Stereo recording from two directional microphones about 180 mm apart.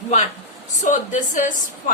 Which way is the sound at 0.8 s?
45° left (ahead or behind).